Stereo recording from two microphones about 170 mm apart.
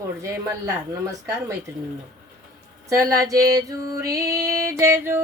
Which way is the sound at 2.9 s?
20° right (ahead or behind).